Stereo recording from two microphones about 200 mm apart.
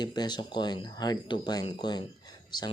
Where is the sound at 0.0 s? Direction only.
20° left (ahead or behind).